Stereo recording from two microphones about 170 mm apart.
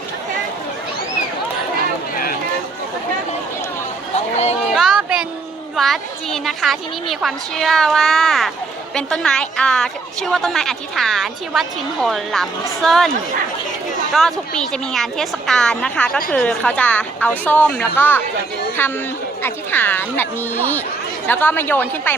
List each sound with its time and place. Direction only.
4.1 s chatter: 40° left (ahead or behind)
4.7 s a sound: centre (ahead or behind)
5.7 s a woman's voice: centre (ahead or behind)
14.1 s a woman's voice: centre (ahead or behind)